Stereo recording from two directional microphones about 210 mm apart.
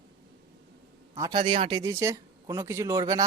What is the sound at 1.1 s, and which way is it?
Speech, 20° right (ahead or behind).